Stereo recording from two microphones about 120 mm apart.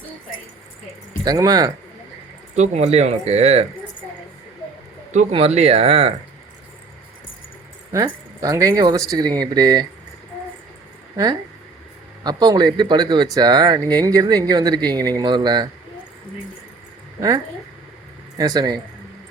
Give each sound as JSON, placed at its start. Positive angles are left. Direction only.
{"t": 1.2, "sound": "speech", "side_deg": -30}
{"t": 2.6, "sound": "speech", "side_deg": -65}
{"t": 5.3, "sound": "speech", "side_deg": -60}
{"t": 8.0, "sound": "speech", "side_deg": -30}
{"t": 12.2, "sound": "speech", "side_deg": -35}
{"t": 17.2, "sound": "speech", "side_deg": -30}